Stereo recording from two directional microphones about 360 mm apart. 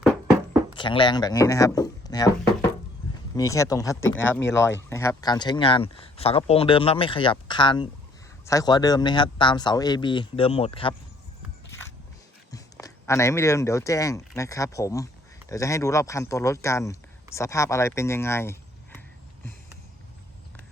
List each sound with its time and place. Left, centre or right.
0.7 s speech: centre
3.3 s speech: centre
4.4 s speech: left
4.6 s speech: centre
12.5 s speech: centre